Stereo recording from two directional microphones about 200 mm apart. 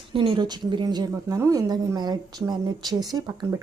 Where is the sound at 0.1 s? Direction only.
25° right (ahead or behind).